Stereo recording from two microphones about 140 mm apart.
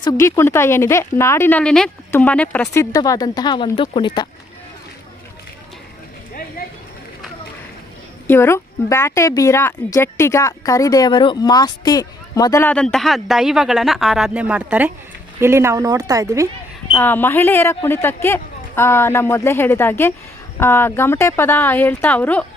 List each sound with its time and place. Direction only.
0.0 s a woman's voice: 20° left (ahead or behind)
2.9 s speech: 25° left (ahead or behind)
8.3 s a woman's voice: 20° left (ahead or behind)
12.6 s speech: 5° left (ahead or behind); by 16.5 s 25° right (ahead or behind)
17.0 s a woman's voice: 15° left (ahead or behind)